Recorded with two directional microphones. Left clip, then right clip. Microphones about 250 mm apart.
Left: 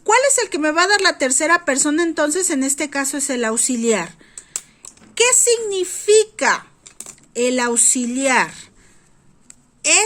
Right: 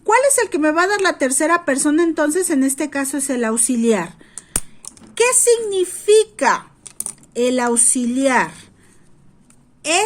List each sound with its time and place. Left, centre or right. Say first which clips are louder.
0.0 s a woman's voice: right 1 dB; centre
9.8 s a woman's voice: left 2 dB; centre